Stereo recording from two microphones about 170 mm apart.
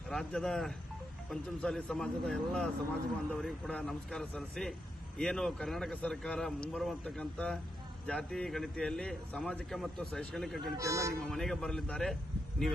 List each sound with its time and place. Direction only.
0.1 s a man's voice: 5° left (ahead or behind)
10.8 s speech: 20° right (ahead or behind)
11.2 s a man's voice: centre (ahead or behind)